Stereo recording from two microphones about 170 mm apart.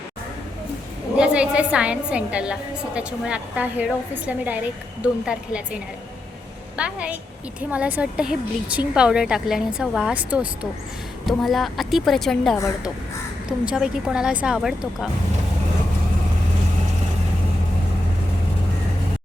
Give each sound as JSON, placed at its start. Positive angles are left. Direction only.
{"t": 1.1, "sound": "a woman's voice", "side_deg": -5}
{"t": 12.5, "sound": "a woman's voice", "side_deg": 15}
{"t": 13.7, "sound": "a woman's voice", "side_deg": -5}